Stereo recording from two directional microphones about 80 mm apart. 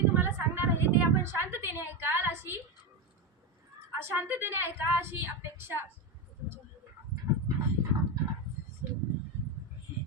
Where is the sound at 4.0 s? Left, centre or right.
Right.